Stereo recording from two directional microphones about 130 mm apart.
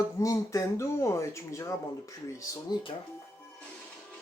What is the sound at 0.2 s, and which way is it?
Speech, 25° left (ahead or behind).